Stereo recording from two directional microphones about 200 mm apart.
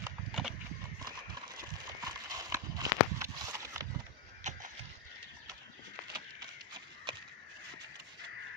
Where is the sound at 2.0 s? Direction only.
15° right (ahead or behind).